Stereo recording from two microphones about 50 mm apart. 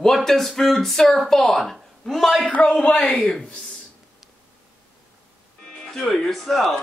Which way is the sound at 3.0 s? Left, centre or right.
Centre.